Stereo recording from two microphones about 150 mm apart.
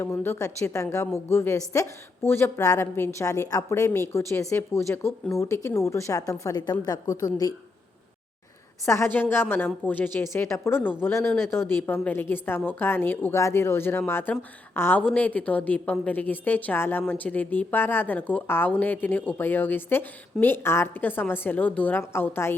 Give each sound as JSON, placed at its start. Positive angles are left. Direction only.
{"t": 0.0, "sound": "a woman's voice", "side_deg": 15}
{"t": 8.9, "sound": "a woman's voice", "side_deg": 15}